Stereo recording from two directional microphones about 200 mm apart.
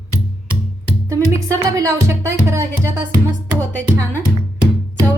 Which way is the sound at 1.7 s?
15° right (ahead or behind).